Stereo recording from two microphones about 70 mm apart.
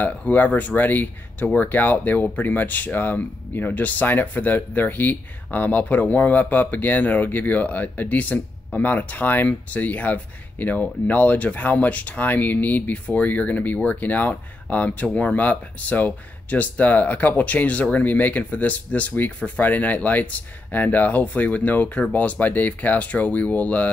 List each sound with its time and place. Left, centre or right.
0.0 s speech: left